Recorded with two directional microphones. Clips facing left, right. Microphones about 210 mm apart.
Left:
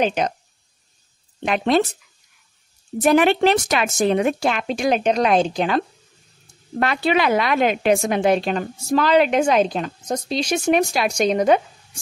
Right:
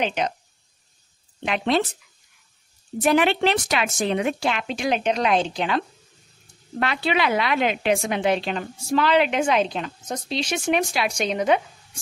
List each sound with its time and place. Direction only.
0.0 s a woman's voice: 45° left (ahead or behind)
1.4 s a woman's voice: 45° left (ahead or behind)
3.0 s a woman's voice: 45° left (ahead or behind)